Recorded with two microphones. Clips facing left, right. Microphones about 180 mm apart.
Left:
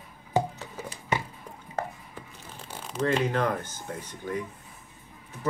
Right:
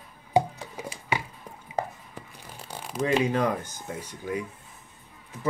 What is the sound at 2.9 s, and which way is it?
Speech, 10° right (ahead or behind).